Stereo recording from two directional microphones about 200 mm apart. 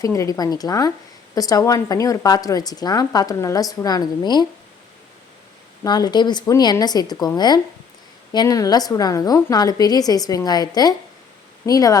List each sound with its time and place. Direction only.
0.0 s speech: 15° left (ahead or behind)
5.8 s speech: 20° left (ahead or behind)